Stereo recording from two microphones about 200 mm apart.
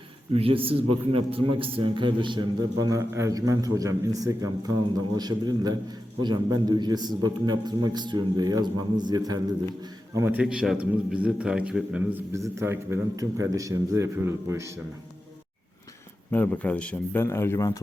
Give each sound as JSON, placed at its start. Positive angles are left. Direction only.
{"t": 0.3, "sound": "a man's voice", "side_deg": -30}
{"t": 10.2, "sound": "a man's voice", "side_deg": -10}
{"t": 16.3, "sound": "speech", "side_deg": 5}